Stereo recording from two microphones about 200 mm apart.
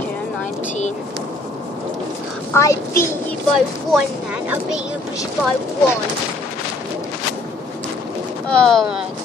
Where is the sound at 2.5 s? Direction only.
15° left (ahead or behind).